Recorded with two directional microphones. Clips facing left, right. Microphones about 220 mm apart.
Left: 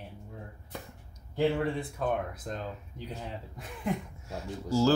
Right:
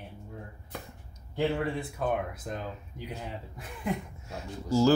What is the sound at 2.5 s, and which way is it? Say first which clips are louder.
Speech: right 1 dB; 10° right (ahead or behind).